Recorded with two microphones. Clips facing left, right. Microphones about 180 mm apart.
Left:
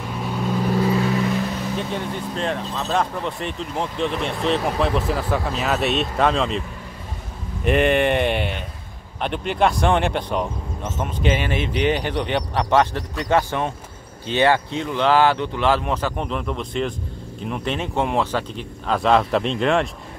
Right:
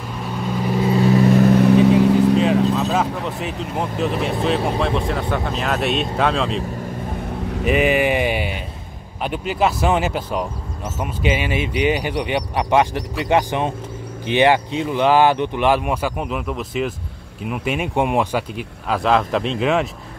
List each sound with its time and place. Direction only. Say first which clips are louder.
1.3 s vehicle: right 11 dB; 50° right (ahead or behind); by 2.3 s 80° right
2.3 s speech: right 9 dB; 5° right (ahead or behind)
7.6 s speech: even; 5° right (ahead or behind)
18.9 s speech: even; centre (ahead or behind)